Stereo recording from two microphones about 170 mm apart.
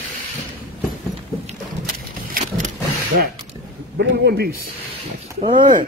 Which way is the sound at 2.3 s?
50° right (ahead or behind).